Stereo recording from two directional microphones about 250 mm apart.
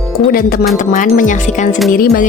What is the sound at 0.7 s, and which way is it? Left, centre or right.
Speech, left.